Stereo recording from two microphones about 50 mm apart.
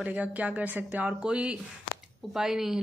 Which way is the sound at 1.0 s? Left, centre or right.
Centre.